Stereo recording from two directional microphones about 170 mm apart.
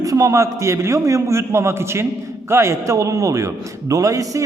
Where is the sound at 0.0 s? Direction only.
20° right (ahead or behind).